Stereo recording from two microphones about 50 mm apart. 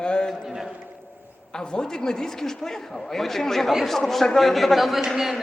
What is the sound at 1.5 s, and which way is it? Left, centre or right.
A woman's voice, centre.